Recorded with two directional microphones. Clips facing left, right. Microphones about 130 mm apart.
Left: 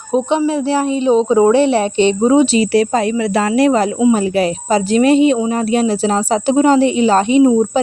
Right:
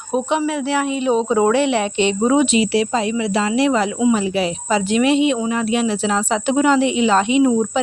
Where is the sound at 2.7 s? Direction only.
50° left (ahead or behind).